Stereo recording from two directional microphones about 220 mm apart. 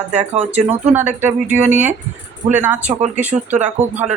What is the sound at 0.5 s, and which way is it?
Speech, 10° right (ahead or behind).